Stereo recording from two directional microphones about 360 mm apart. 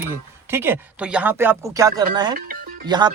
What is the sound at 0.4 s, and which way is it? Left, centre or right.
Speech, centre.